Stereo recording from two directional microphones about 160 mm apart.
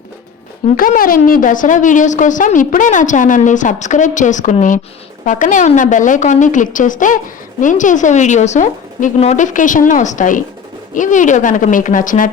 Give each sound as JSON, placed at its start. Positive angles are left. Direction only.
{"t": 0.7, "sound": "a woman's voice", "side_deg": 60}